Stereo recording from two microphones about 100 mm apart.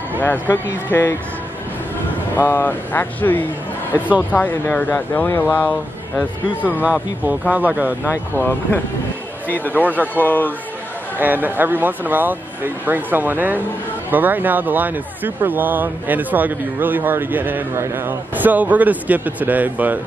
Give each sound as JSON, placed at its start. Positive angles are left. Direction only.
{"t": 0.2, "sound": "speech", "side_deg": 20}
{"t": 2.3, "sound": "speech", "side_deg": 20}
{"t": 6.8, "sound": "speech", "side_deg": -15}
{"t": 8.4, "sound": "speech", "side_deg": 20}
{"t": 11.1, "sound": "speech", "side_deg": -20}